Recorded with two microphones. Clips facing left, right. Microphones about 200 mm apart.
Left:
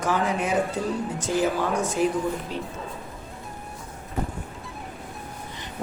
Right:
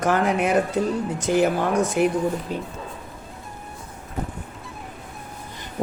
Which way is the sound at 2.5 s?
45° right (ahead or behind).